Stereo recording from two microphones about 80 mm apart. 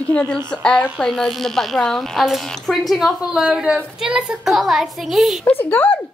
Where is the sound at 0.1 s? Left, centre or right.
Centre.